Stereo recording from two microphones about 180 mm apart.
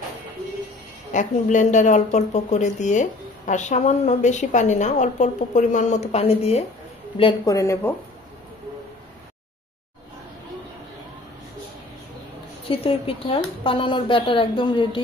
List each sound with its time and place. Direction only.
1.1 s speech: 45° left (ahead or behind)
7.5 s speech: 15° left (ahead or behind)
12.6 s speech: 30° left (ahead or behind)